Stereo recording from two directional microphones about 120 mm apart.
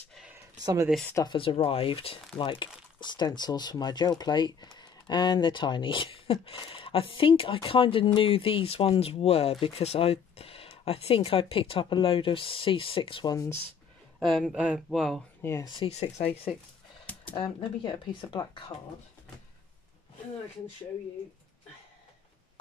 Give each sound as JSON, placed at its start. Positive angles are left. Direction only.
{"t": 1.2, "sound": "speech", "side_deg": 45}
{"t": 14.2, "sound": "speech", "side_deg": -5}
{"t": 15.6, "sound": "speech", "side_deg": 45}
{"t": 15.9, "sound": "speech", "side_deg": 65}
{"t": 17.0, "sound": "a sound", "side_deg": 15}
{"t": 17.4, "sound": "speech", "side_deg": 45}